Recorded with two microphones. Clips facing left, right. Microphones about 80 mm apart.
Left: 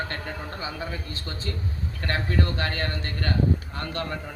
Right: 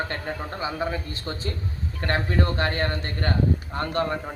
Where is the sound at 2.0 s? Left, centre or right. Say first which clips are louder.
Right 2 dB; right.